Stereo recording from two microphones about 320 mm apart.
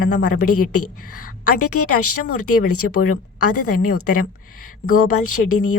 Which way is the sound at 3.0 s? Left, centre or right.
Left.